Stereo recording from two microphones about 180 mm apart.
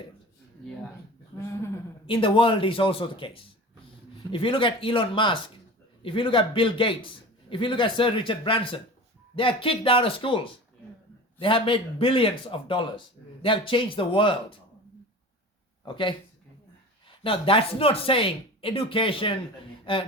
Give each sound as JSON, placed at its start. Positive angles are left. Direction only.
{"t": 2.0, "sound": "a man's voice", "side_deg": 30}
{"t": 15.8, "sound": "speech", "side_deg": 25}
{"t": 17.2, "sound": "speech", "side_deg": 30}